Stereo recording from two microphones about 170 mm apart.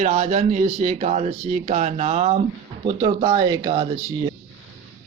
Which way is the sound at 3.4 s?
20° right (ahead or behind).